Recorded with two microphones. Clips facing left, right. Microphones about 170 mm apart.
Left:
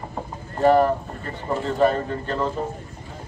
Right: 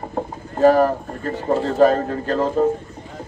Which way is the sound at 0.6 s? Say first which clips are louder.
Right 3 dB; 40° right (ahead or behind).